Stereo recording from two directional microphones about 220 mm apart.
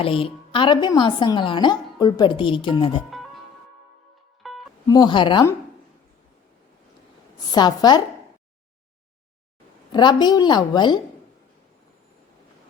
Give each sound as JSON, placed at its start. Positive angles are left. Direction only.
{"t": 0.0, "sound": "a woman's voice", "side_deg": 25}
{"t": 4.4, "sound": "music", "side_deg": 0}
{"t": 4.9, "sound": "a woman's voice", "side_deg": 20}
{"t": 7.3, "sound": "a woman's voice", "side_deg": 20}
{"t": 9.9, "sound": "a woman's voice", "side_deg": 20}